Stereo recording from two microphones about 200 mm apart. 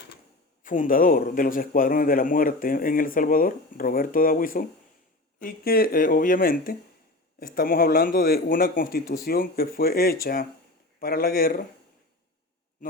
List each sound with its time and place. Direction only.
0.6 s a man's voice: 40° left (ahead or behind)